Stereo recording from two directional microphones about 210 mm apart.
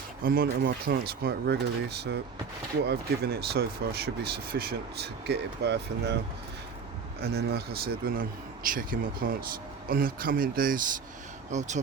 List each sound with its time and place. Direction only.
0.3 s speech: 50° right (ahead or behind)
7.2 s speech: 50° right (ahead or behind); by 11.7 s 35° right (ahead or behind)